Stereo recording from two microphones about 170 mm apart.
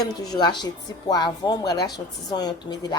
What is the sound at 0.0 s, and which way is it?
A woman's voice, 25° left (ahead or behind).